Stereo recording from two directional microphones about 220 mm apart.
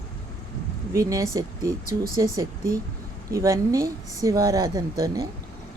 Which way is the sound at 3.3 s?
15° right (ahead or behind).